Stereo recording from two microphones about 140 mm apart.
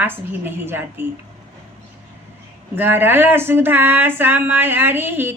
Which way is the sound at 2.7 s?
15° right (ahead or behind).